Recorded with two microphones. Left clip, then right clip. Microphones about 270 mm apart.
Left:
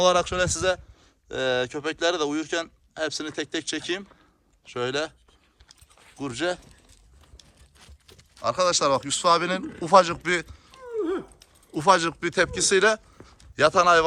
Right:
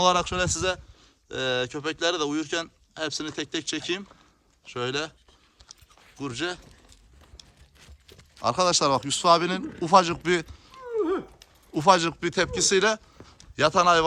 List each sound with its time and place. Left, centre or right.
0.0 s speech: centre
5.6 s chewing: centre
6.1 s speech: centre
8.4 s speech: centre
10.9 s a sound: right
11.7 s speech: centre